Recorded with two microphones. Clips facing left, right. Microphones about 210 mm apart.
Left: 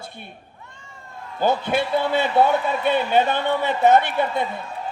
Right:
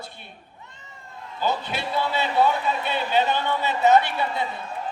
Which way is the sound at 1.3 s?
50° left (ahead or behind).